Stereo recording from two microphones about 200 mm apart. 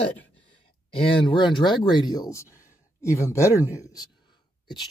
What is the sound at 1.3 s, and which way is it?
Speech, 25° left (ahead or behind).